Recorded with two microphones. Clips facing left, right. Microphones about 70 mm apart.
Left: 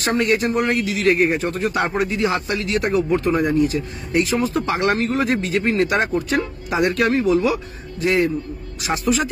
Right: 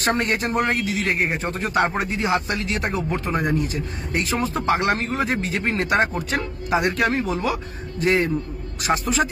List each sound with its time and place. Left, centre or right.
0.0 s speech: right
1.0 s speech: right
1.4 s speech: right
6.8 s speech: right